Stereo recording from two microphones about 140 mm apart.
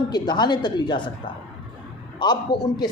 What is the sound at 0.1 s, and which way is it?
Speech, 30° left (ahead or behind).